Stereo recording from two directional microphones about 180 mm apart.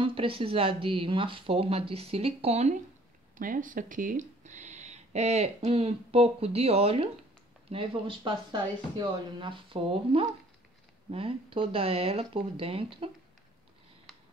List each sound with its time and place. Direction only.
0.0 s speech: 30° right (ahead or behind)
3.3 s speech: 50° right (ahead or behind); by 13.1 s 30° right (ahead or behind)
14.1 s a sound: centre (ahead or behind)